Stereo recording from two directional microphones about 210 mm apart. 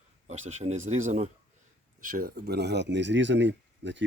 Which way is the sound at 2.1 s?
45° right (ahead or behind).